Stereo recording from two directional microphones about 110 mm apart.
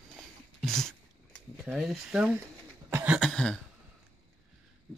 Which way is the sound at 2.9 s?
20° right (ahead or behind).